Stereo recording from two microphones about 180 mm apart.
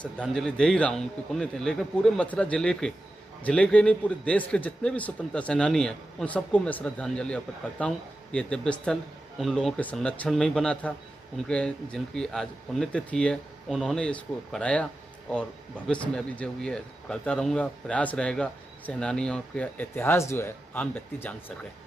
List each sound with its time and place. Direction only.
0.0 s speech: 5° left (ahead or behind)
15.9 s speech: 5° left (ahead or behind)